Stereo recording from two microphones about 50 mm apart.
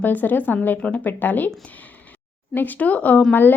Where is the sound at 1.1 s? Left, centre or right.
Left.